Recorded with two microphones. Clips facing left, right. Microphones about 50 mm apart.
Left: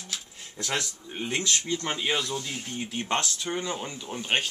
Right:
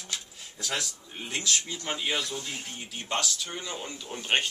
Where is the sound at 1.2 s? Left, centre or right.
Left.